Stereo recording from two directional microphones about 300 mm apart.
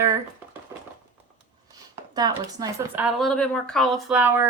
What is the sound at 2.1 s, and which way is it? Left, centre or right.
Speech, centre.